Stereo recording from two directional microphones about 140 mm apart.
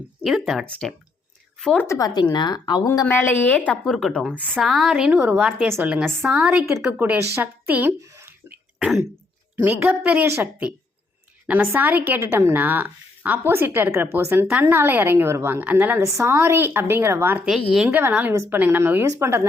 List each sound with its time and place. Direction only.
0.3 s a woman's voice: centre (ahead or behind)
1.9 s speech: 25° left (ahead or behind)
3.1 s a woman's voice: 15° left (ahead or behind)
3.7 s a woman's voice: centre (ahead or behind)
6.8 s a woman's voice: 15° right (ahead or behind)
8.4 s throat clearing: 5° right (ahead or behind)
9.6 s a woman's voice: 10° right (ahead or behind)
17.4 s speech: 5° right (ahead or behind)
17.8 s a woman's voice: 15° right (ahead or behind)